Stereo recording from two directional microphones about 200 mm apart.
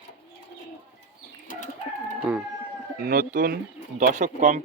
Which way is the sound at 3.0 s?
45° right (ahead or behind).